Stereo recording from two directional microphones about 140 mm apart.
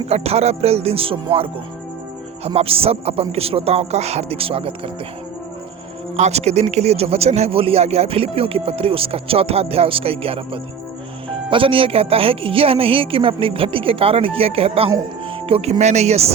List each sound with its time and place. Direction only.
0.1 s speech: 45° right (ahead or behind)
2.6 s speech: 45° right (ahead or behind)
6.1 s speech: 50° right (ahead or behind)
15.8 s speech: 55° right (ahead or behind)